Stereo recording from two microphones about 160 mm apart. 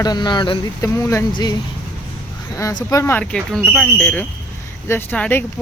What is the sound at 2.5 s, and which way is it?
Speech, 20° left (ahead or behind).